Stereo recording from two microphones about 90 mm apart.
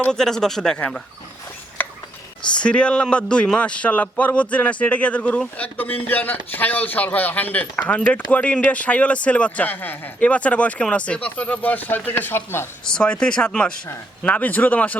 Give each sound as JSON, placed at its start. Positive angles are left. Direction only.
{"t": 0.0, "sound": "speech", "side_deg": 5}
{"t": 2.6, "sound": "speech", "side_deg": 10}
{"t": 12.8, "sound": "speech", "side_deg": 10}